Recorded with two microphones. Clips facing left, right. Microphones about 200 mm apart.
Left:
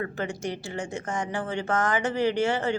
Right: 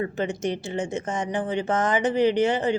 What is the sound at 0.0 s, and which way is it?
A woman's voice, 20° right (ahead or behind).